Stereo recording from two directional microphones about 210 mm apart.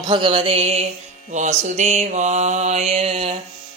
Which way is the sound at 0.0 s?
20° right (ahead or behind).